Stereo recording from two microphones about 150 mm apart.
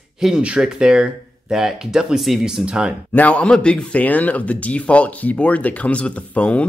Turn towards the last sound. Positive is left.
turn(degrees=10)  # may be behind; listen again after turning